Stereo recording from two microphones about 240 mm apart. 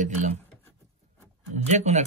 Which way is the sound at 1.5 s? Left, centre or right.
Right.